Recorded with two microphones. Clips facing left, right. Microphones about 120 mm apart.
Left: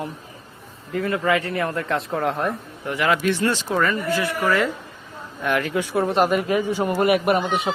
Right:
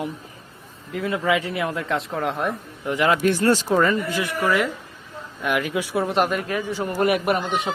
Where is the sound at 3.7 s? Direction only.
20° right (ahead or behind).